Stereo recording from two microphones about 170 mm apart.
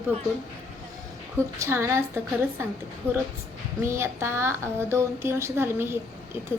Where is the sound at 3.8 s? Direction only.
15° right (ahead or behind).